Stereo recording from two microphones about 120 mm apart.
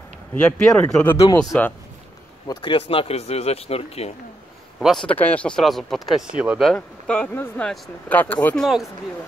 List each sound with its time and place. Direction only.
0.3 s speech: 10° left (ahead or behind)
1.0 s speech: 20° left (ahead or behind)
2.4 s speech: 40° left (ahead or behind); by 4.1 s 55° left (ahead or behind)
4.7 s a man's voice: centre (ahead or behind)
5.0 s speech: 15° left (ahead or behind)
5.6 s speech: centre (ahead or behind)
6.6 s speech: 5° left (ahead or behind)
8.5 s speech: centre (ahead or behind)